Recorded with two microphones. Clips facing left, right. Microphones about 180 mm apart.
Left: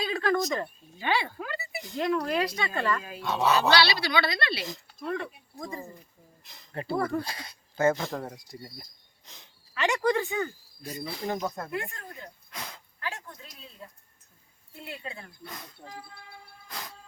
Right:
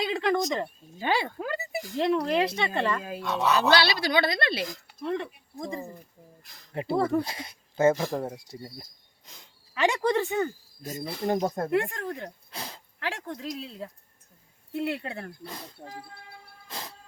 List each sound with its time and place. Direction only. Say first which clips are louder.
0.0 s speech: right 1 dB; 20° right (ahead or behind)
0.9 s a sound: right 2 dB; 45° right (ahead or behind)
2.0 s speech: right 3 dB; 25° right (ahead or behind)
3.2 s speech: left 1 dB; centre (ahead or behind)
3.7 s a woman's voice: right 1 dB; 50° right (ahead or behind)
5.0 s speech: right 2 dB; 20° right (ahead or behind)
9.7 s speech: right 1 dB; 30° right (ahead or behind)
10.8 s a woman's voice: right 4 dB; 50° right (ahead or behind)
11.3 s speech: right 6 dB; 35° right (ahead or behind)
11.7 s speech: right 9 dB; 80° right
12.5 s a sound: right 2 dB; 30° right (ahead or behind)
13.0 s a woman's voice: right 6 dB; 80° right; by 15.3 s 65° right (ahead or behind)
15.4 s speech: right 3 dB; 30° right (ahead or behind)
16.6 s insect: right 2 dB; 30° right (ahead or behind)